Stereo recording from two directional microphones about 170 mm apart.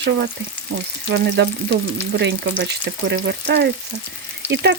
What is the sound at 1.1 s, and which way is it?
Frying, 85° right.